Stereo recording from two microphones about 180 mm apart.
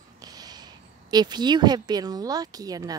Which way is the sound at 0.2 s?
20° right (ahead or behind).